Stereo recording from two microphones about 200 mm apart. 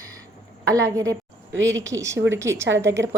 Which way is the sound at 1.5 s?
70° right (ahead or behind).